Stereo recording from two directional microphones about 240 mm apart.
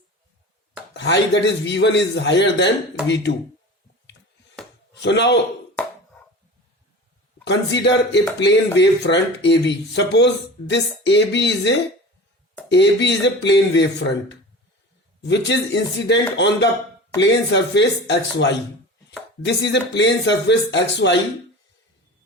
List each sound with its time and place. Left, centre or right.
0.9 s speech: left
4.9 s a man's voice: left
7.4 s speech: left
19.5 s speech: left